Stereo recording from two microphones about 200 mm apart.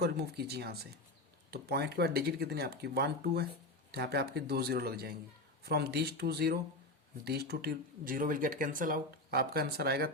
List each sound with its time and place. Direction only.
0.0 s speech: 55° right (ahead or behind)